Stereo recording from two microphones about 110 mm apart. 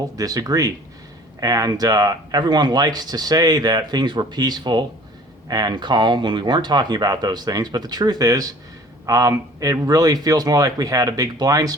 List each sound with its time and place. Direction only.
0.2 s speech: 35° right (ahead or behind)